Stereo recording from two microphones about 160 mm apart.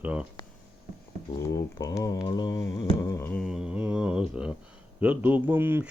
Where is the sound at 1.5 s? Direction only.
20° left (ahead or behind).